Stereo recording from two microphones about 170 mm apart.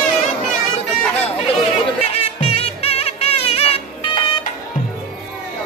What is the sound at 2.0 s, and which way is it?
Music, 35° left (ahead or behind).